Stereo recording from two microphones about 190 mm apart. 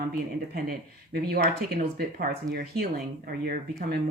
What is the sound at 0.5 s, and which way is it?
Speech, 55° right (ahead or behind).